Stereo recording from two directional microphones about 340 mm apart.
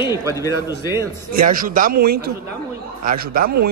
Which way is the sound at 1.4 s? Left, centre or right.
Right.